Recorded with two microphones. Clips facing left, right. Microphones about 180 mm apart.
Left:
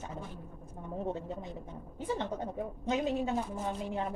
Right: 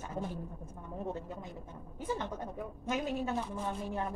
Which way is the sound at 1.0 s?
20° left (ahead or behind).